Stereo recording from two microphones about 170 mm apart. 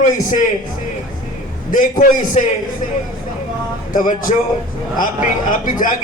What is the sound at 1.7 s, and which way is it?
Speech, 50° left (ahead or behind).